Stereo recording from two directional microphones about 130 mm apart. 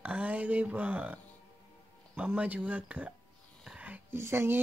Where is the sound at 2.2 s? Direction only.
10° right (ahead or behind).